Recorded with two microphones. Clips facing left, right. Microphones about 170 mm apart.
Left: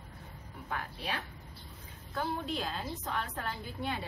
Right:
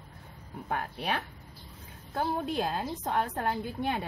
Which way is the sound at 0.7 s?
60° right (ahead or behind).